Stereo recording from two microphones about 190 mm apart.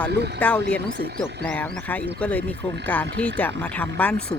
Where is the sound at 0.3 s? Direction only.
5° left (ahead or behind).